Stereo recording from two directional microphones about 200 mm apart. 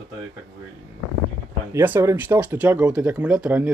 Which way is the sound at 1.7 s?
10° right (ahead or behind).